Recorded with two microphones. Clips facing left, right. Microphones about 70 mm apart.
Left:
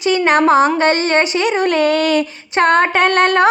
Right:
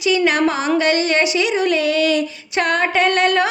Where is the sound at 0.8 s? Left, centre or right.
Left.